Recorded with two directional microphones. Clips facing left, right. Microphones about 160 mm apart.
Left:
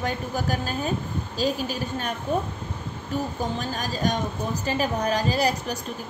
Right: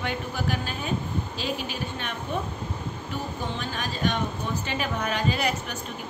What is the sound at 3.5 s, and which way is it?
A woman's voice, 40° left (ahead or behind).